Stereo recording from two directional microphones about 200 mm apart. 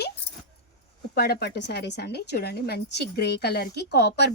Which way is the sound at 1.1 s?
50° left (ahead or behind).